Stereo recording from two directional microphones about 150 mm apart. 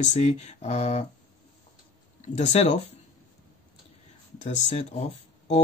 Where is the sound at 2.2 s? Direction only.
45° left (ahead or behind).